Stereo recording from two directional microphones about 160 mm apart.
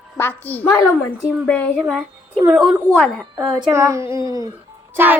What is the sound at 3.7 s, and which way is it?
Speech, 20° right (ahead or behind).